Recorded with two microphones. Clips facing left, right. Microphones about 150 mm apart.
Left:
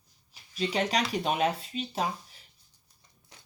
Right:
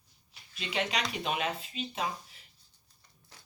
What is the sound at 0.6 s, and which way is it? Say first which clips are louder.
Speech: left 5 dB; 40° left (ahead or behind).